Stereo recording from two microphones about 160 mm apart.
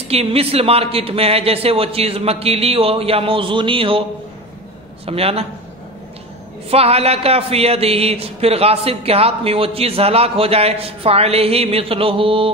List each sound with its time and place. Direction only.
0.1 s speech: 40° right (ahead or behind)
5.0 s speech: 40° right (ahead or behind)
6.7 s speech: 40° right (ahead or behind)